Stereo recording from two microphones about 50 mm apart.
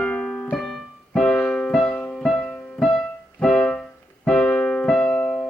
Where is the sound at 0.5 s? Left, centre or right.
Centre.